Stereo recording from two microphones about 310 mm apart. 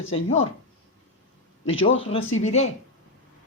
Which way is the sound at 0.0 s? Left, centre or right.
Left.